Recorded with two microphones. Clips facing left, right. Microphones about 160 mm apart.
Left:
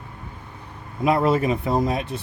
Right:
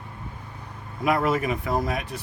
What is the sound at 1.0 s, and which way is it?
Speech, 25° left (ahead or behind).